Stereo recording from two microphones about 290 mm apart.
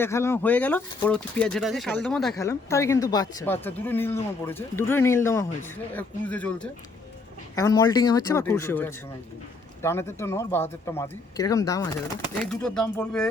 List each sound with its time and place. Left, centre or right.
0.0 s speech: centre